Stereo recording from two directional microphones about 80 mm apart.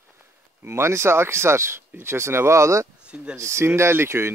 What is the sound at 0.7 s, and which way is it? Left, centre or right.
A man's voice, right.